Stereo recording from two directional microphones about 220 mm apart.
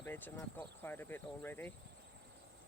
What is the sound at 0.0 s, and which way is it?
Speech, 10° left (ahead or behind).